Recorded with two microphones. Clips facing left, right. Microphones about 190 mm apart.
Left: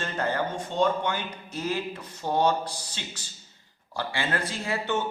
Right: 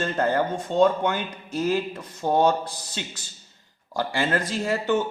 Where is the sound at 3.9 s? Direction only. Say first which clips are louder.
Right 5 dB; 40° right (ahead or behind).